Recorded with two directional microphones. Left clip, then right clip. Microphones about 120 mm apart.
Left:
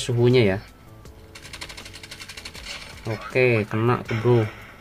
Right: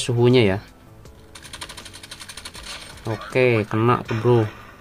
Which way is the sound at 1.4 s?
40° right (ahead or behind).